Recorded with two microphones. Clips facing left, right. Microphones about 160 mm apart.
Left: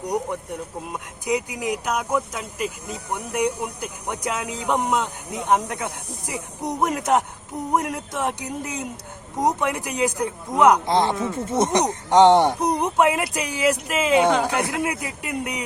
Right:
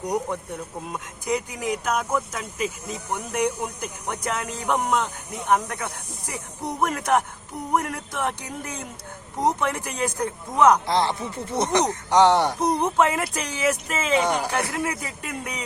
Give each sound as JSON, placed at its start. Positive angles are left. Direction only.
{"t": 0.9, "sound": "speech", "side_deg": 15}
{"t": 11.1, "sound": "speech", "side_deg": 50}
{"t": 11.6, "sound": "speech", "side_deg": 15}